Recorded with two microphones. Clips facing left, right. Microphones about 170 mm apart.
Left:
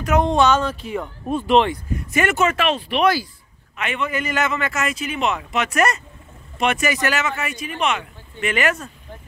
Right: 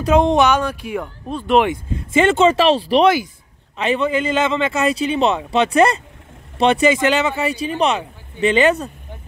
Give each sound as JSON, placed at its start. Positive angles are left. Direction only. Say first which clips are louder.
{"t": 0.0, "sound": "speech", "louder": "right 3 dB", "side_deg": -20}
{"t": 0.8, "sound": "speech", "louder": "right 2 dB", "side_deg": -5}
{"t": 1.7, "sound": "a man's voice", "louder": "right 4 dB", "side_deg": -25}